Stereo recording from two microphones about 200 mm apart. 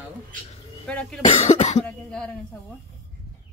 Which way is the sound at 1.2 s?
35° left (ahead or behind).